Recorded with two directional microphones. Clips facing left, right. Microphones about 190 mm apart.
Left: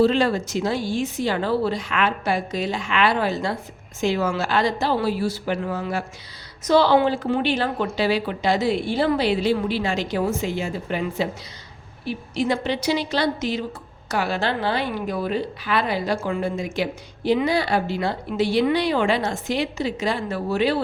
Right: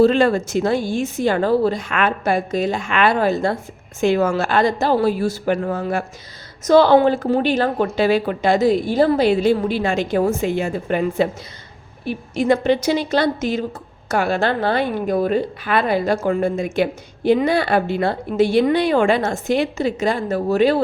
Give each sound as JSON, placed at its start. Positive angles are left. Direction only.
{"t": 0.0, "sound": "a woman's voice", "side_deg": -50}